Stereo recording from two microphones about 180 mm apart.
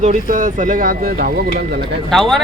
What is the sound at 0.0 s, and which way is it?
Speech, 45° right (ahead or behind).